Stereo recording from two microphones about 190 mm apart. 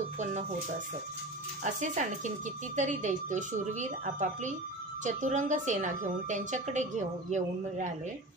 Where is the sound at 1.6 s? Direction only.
40° right (ahead or behind).